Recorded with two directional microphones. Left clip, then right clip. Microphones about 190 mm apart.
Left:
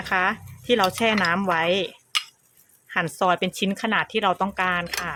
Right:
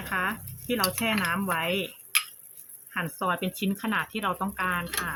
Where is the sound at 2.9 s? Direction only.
55° left (ahead or behind).